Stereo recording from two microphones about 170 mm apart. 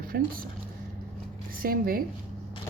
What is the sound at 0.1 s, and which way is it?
Speech, 65° right (ahead or behind).